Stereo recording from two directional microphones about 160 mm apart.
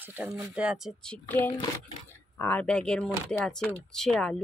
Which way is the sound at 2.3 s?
15° left (ahead or behind).